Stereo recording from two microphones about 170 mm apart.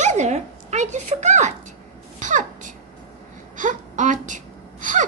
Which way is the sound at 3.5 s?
45° right (ahead or behind).